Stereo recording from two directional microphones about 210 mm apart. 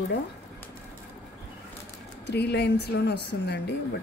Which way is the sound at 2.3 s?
50° left (ahead or behind).